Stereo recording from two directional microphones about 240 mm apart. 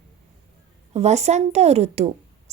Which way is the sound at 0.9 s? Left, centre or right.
Right.